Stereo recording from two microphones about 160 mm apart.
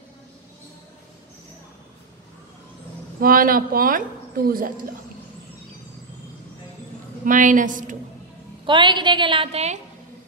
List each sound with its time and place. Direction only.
3.2 s speech: 65° right (ahead or behind)
7.2 s speech: 55° right (ahead or behind)
8.6 s a woman's voice: 30° right (ahead or behind)